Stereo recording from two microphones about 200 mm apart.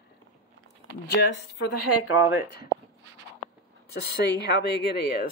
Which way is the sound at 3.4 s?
35° left (ahead or behind).